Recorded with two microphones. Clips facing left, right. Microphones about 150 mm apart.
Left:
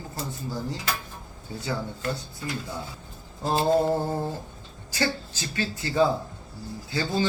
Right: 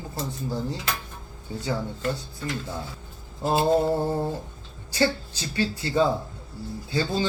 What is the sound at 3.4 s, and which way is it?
Speech, 15° right (ahead or behind).